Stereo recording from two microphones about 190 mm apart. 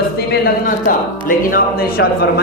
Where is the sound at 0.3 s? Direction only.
50° left (ahead or behind).